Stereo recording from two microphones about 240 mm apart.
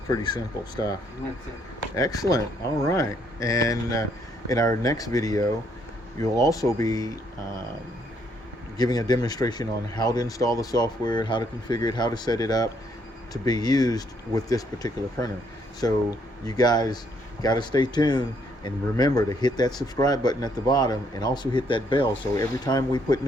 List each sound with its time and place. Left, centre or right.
2.0 s speech: centre
8.8 s speech: centre